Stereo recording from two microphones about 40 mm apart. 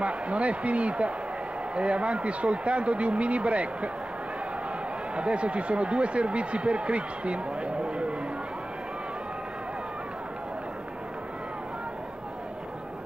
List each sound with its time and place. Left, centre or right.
0.0 s a man's voice: right
5.1 s speech: right